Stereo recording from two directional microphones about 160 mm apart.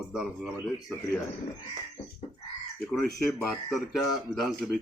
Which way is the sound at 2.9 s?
Centre (ahead or behind).